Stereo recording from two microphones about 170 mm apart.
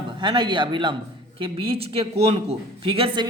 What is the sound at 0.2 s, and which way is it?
A man's voice, 30° right (ahead or behind).